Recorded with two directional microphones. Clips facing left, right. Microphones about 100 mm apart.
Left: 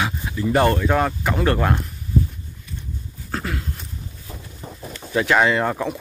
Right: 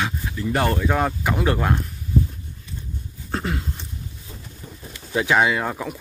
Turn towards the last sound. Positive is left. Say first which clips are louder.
# left 4 dB
turn(degrees=0)  # may be behind; listen again after turning